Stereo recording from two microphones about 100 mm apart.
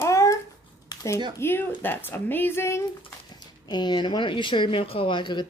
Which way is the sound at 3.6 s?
45° left (ahead or behind).